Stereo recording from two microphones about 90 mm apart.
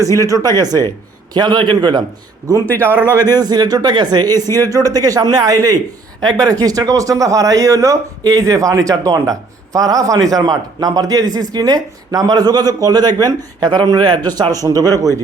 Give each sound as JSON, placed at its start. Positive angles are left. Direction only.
{"t": 0.2, "sound": "speech", "side_deg": -40}
{"t": 2.6, "sound": "a man's voice", "side_deg": 20}
{"t": 3.2, "sound": "a man's voice", "side_deg": -45}